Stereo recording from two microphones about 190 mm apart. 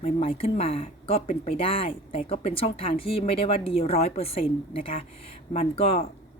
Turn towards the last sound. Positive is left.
turn(degrees=30)  # may be behind; listen again after turning